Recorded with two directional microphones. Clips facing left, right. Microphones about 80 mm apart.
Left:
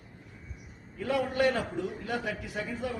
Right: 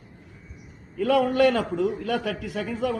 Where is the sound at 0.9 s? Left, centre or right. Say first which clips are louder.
Right 8 dB; right.